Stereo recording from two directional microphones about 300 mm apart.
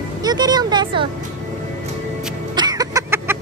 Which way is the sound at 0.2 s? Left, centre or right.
Centre.